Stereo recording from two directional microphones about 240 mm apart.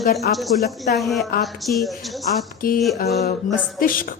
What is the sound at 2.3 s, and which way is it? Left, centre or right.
A woman's voice, left.